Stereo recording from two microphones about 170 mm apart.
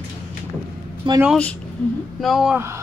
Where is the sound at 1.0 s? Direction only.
30° right (ahead or behind).